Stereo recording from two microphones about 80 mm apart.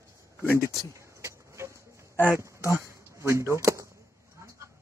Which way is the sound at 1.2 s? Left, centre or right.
Right.